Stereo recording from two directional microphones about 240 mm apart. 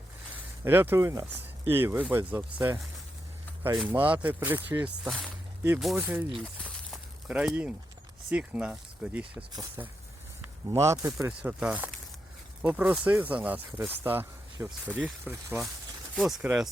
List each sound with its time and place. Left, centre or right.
0.6 s speech: centre
6.6 s a sound: centre
8.3 s speech: centre